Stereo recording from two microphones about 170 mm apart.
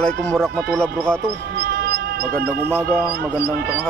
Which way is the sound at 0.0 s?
10° left (ahead or behind).